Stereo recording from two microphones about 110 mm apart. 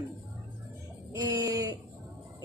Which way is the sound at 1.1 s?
30° right (ahead or behind).